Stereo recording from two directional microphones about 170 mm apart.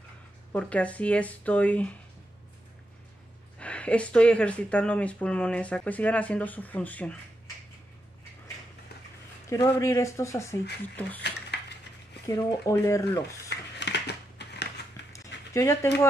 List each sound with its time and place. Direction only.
0.5 s speech: 5° left (ahead or behind)
3.5 s speech: 5° left (ahead or behind)
9.5 s speech: 20° left (ahead or behind)
12.3 s speech: 20° left (ahead or behind)
13.5 s a sound: 85° left
15.1 s a sound: 15° left (ahead or behind)